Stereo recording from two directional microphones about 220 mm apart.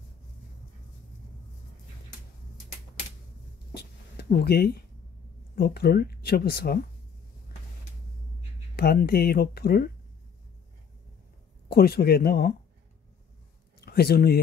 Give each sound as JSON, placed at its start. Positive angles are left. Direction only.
{"t": 3.7, "sound": "a sound", "side_deg": 45}
{"t": 5.6, "sound": "speech", "side_deg": 45}
{"t": 8.7, "sound": "speech", "side_deg": 45}
{"t": 11.7, "sound": "speech", "side_deg": 45}
{"t": 13.7, "sound": "speech", "side_deg": 45}